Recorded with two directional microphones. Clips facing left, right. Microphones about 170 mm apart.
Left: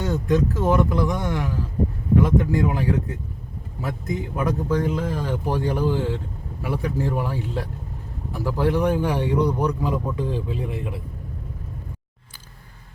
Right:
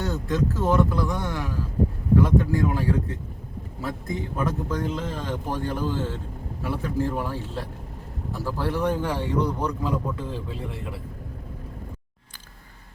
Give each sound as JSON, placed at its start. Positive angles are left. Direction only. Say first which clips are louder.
{"t": 0.0, "sound": "speech", "louder": "left 4 dB", "side_deg": 15}